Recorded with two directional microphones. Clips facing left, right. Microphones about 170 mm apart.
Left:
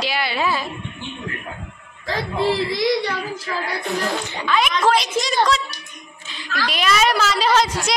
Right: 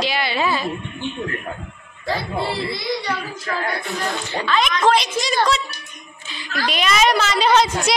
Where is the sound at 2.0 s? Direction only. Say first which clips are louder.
Left 2 dB; 90° left.